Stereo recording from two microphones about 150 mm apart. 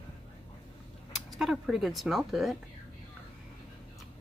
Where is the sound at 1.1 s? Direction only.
Centre (ahead or behind).